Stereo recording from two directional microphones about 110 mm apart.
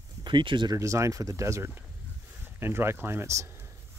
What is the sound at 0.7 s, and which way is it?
Speech, 30° right (ahead or behind).